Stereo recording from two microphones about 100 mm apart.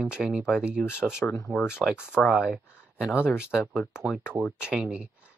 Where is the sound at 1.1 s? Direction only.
25° left (ahead or behind).